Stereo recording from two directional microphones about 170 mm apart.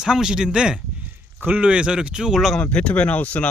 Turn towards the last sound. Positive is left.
turn(degrees=10)  # may be behind; listen again after turning